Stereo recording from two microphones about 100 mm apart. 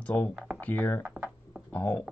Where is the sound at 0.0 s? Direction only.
15° left (ahead or behind).